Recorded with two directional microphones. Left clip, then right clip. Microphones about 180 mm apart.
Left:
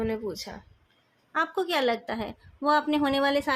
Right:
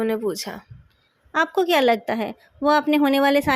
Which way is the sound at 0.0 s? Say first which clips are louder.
Right 7 dB; 40° right (ahead or behind).